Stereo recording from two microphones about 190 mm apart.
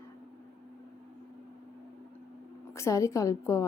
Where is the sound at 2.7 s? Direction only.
15° left (ahead or behind).